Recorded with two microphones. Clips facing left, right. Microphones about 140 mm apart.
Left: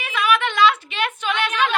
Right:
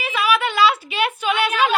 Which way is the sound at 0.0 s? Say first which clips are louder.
Right 1 dB; 5° right (ahead or behind).